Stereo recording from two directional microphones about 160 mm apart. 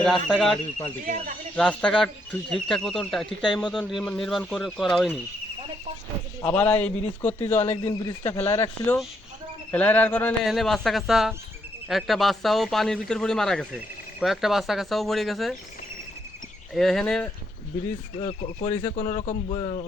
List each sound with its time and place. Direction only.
0.3 s speech: centre (ahead or behind)
1.0 s speech: 50° right (ahead or behind)
1.5 s speech: 5° left (ahead or behind)
6.4 s a man's voice: 10° left (ahead or behind)
10.4 s speech: centre (ahead or behind)
16.7 s speech: centre (ahead or behind)
18.2 s a man's voice: 35° left (ahead or behind)
19.5 s speech: 35° left (ahead or behind)